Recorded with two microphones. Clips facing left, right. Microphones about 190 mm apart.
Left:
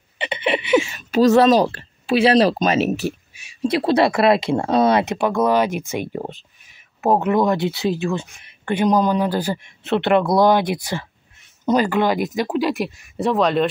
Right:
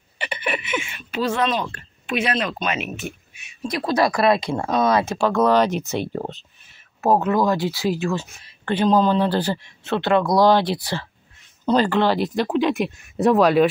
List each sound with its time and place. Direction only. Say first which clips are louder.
0.2 s speech: left 5 dB; 25° left (ahead or behind)
5.1 s speech: even; 15° left (ahead or behind); by 13.7 s 5° right (ahead or behind)